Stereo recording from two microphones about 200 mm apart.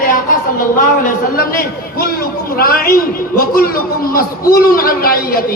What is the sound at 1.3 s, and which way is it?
A man's voice, 50° left (ahead or behind).